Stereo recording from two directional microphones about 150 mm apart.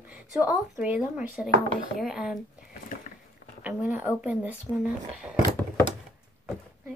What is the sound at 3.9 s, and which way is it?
Speech, 10° right (ahead or behind).